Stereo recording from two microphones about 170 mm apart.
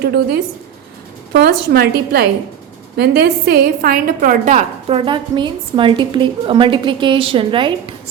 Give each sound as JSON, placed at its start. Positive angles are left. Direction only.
{"t": 1.3, "sound": "a woman's voice", "side_deg": -65}
{"t": 4.9, "sound": "a woman's voice", "side_deg": -30}